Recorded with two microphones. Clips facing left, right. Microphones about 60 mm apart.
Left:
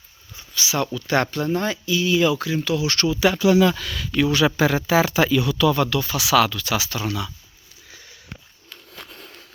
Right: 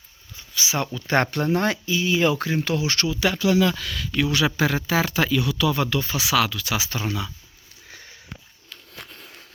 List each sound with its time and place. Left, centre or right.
0.5 s speech: right
1.3 s speech: right
1.9 s speech: right
2.2 s speech: right
3.0 s speech: centre
5.9 s speech: right
6.3 s speech: centre
6.7 s speech: right
8.7 s a sound: centre